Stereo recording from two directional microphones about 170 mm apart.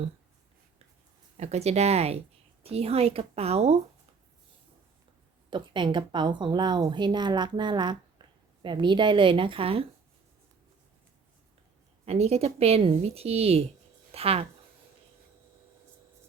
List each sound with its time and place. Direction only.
1.4 s a woman's voice: 40° right (ahead or behind)
5.5 s a woman's voice: 30° right (ahead or behind)
12.0 s a woman's voice: 40° right (ahead or behind)